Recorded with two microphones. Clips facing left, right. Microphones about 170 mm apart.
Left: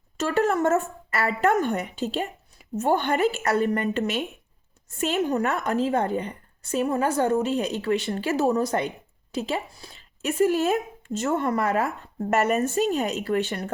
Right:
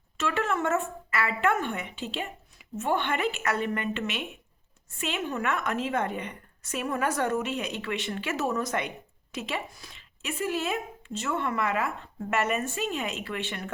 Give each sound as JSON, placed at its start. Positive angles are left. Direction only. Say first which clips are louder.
{"t": 0.2, "sound": "a woman's voice", "louder": "left 6 dB", "side_deg": 40}
{"t": 10.2, "sound": "a woman's voice", "louder": "left 9 dB", "side_deg": 45}